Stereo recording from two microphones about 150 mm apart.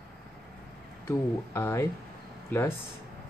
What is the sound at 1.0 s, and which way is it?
Speech, 15° left (ahead or behind).